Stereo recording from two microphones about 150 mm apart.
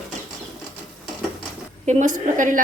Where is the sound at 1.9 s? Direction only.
55° right (ahead or behind).